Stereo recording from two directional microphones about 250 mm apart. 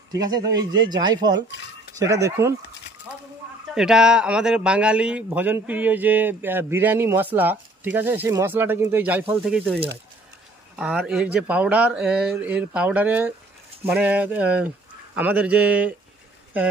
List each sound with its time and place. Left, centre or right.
0.1 s a man's voice: centre
3.7 s a man's voice: centre
10.8 s speech: centre